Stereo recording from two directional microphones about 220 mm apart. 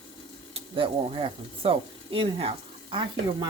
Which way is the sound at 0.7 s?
25° right (ahead or behind).